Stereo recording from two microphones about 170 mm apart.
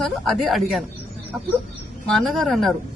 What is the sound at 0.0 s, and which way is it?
Speech, centre (ahead or behind).